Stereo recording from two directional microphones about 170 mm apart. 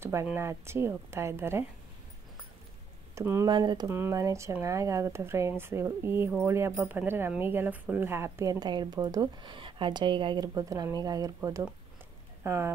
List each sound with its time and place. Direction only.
0.0 s speech: 15° right (ahead or behind)
3.2 s speech: 15° right (ahead or behind)